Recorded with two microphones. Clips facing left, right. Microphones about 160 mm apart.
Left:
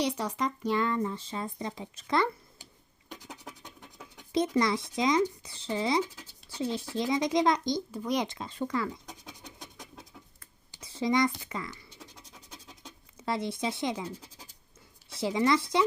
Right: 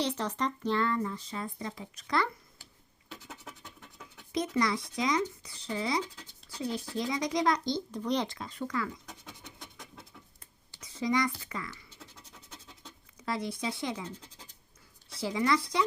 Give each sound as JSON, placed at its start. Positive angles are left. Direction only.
{"t": 0.0, "sound": "speech", "side_deg": 10}
{"t": 0.9, "sound": "speech", "side_deg": 25}
{"t": 3.1, "sound": "scratch", "side_deg": 15}
{"t": 4.6, "sound": "speech", "side_deg": 25}
{"t": 10.8, "sound": "scratch", "side_deg": 30}
{"t": 13.1, "sound": "speech", "side_deg": 25}
{"t": 14.0, "sound": "scratch", "side_deg": 10}
{"t": 15.1, "sound": "speech", "side_deg": 25}